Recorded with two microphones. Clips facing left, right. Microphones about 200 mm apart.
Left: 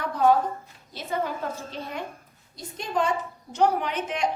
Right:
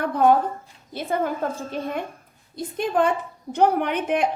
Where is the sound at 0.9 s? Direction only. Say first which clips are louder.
Right 5 dB; 55° right (ahead or behind).